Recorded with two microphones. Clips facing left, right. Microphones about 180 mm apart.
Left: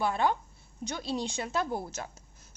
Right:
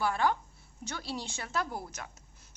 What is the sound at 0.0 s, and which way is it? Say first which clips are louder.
A woman's voice: left 1 dB; 20° left (ahead or behind).